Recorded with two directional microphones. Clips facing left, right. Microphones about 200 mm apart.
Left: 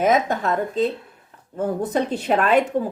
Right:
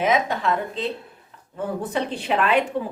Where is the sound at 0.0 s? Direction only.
45° left (ahead or behind).